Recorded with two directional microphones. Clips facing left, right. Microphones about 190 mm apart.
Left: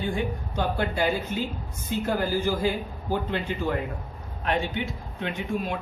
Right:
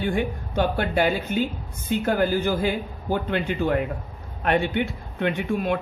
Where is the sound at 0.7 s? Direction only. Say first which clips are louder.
Right 3 dB; 65° right (ahead or behind).